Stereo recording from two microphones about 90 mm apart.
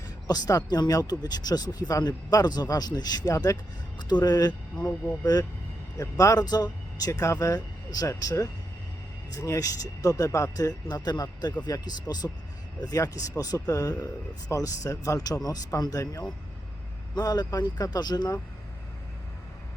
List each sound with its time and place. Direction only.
0.3 s speech: 45° left (ahead or behind)
4.8 s speech: 25° left (ahead or behind)
5.2 s speech: 45° left (ahead or behind)